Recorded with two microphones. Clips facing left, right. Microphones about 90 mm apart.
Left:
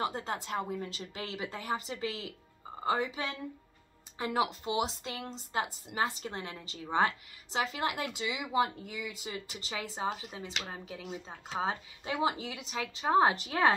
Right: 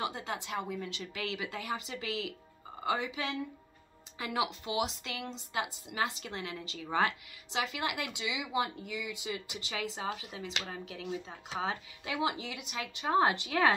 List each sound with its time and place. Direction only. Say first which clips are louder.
0.0 s a woman's voice: left 2 dB; 40° left (ahead or behind)